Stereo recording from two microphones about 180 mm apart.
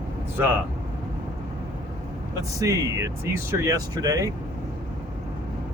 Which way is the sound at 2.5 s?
15° right (ahead or behind).